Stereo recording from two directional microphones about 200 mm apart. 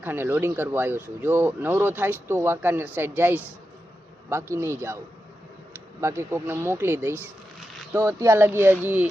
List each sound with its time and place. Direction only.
0.0 s speech: 10° right (ahead or behind)
6.0 s speech: 15° right (ahead or behind)